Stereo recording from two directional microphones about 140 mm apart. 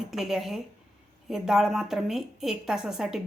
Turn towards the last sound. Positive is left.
turn(degrees=-5)  # may be behind; listen again after turning